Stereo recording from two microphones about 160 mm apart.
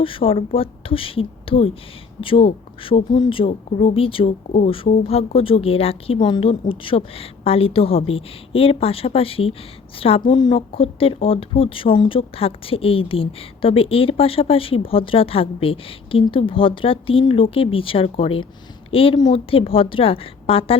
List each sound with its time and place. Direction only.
0.0 s a woman's voice: 35° left (ahead or behind)